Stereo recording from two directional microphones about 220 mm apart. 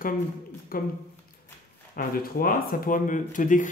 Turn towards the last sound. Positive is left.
turn(degrees=35)  # may be behind; listen again after turning